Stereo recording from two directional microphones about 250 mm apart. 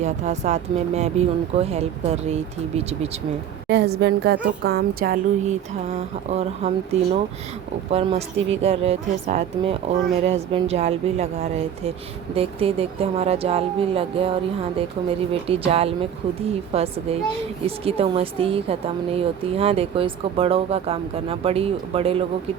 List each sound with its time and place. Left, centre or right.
0.0 s speech: right
3.7 s a woman's voice: right
12.3 s speech: right